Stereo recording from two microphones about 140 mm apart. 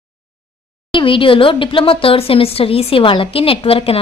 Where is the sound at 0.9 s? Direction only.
40° left (ahead or behind).